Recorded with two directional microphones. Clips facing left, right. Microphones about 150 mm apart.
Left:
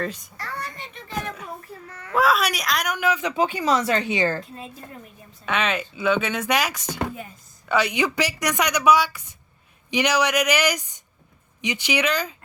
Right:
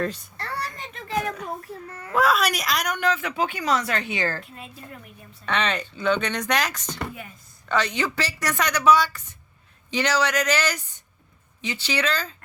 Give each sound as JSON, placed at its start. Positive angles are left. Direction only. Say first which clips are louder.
{"t": 0.3, "sound": "a sound", "louder": "right 1 dB", "side_deg": -35}
{"t": 1.9, "sound": "baby cry", "louder": "right 2 dB", "side_deg": -30}
{"t": 2.1, "sound": "speech", "louder": "left 1 dB", "side_deg": 0}
{"t": 3.2, "sound": "a woman's voice", "louder": "left 3 dB", "side_deg": 20}
{"t": 5.5, "sound": "a woman's voice", "louder": "left 1 dB", "side_deg": 5}